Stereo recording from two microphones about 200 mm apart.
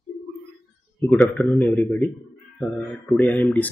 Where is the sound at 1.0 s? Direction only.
10° left (ahead or behind).